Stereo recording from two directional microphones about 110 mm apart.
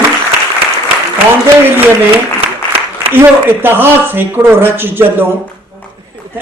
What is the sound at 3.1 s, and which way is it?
Speech, 20° right (ahead or behind).